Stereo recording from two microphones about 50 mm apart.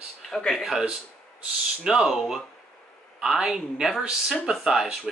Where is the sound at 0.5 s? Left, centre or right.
Centre.